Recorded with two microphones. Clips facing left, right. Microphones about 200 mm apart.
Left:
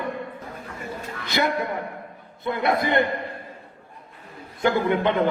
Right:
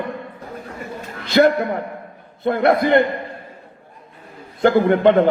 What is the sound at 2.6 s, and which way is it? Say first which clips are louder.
Speech: right 7 dB; 70° right (ahead or behind).